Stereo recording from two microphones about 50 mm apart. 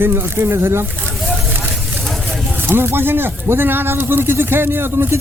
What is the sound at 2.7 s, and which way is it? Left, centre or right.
Speech, right.